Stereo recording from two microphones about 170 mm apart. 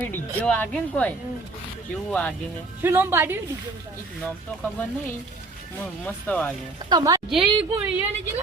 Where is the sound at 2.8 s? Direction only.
15° right (ahead or behind).